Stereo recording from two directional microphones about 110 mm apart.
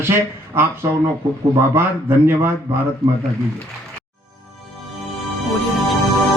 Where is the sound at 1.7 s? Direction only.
20° right (ahead or behind).